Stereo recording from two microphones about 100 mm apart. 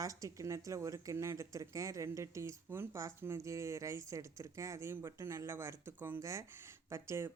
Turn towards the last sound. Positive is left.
turn(degrees=-25)  # may be behind; listen again after turning